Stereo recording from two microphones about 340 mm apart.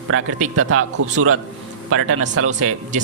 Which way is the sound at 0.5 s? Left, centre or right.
Right.